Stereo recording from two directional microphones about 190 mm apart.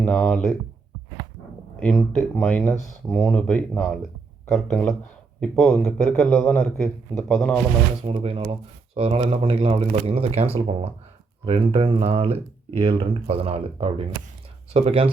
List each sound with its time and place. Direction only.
0.0 s a man's voice: 5° left (ahead or behind)
1.8 s a man's voice: centre (ahead or behind)
8.0 s speech: 30° right (ahead or behind)